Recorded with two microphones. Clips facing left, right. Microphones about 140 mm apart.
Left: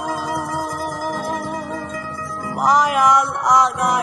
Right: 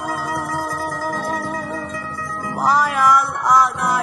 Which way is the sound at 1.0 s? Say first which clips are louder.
Even; 15° left (ahead or behind).